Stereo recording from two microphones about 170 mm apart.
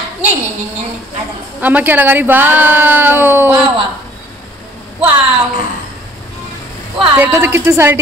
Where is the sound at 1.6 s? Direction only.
10° right (ahead or behind).